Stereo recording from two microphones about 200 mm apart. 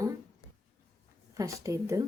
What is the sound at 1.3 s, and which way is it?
Speech, 15° right (ahead or behind).